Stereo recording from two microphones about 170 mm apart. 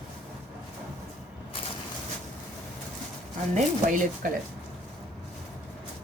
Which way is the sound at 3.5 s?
50° right (ahead or behind).